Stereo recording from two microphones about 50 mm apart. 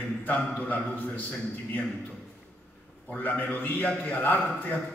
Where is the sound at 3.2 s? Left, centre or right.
Left.